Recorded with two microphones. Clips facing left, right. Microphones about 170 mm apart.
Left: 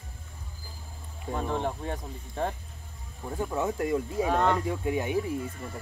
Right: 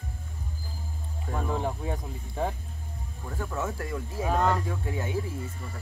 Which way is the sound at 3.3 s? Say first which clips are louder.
Left 3 dB; 15° left (ahead or behind).